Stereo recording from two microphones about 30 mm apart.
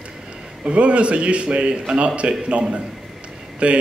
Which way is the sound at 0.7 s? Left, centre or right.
Right.